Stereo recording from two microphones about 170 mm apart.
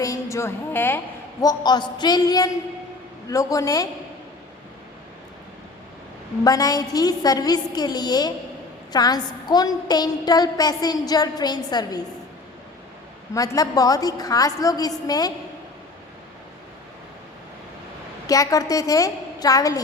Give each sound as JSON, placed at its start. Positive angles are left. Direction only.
{"t": 0.0, "sound": "a woman's voice", "side_deg": 15}
{"t": 6.4, "sound": "a woman's voice", "side_deg": 20}
{"t": 13.3, "sound": "a woman's voice", "side_deg": 20}
{"t": 18.3, "sound": "a woman's voice", "side_deg": 20}